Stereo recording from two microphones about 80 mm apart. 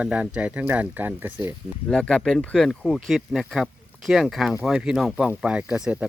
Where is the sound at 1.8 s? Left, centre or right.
Centre.